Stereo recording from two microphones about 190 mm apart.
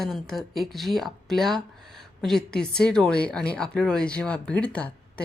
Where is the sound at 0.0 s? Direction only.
Centre (ahead or behind).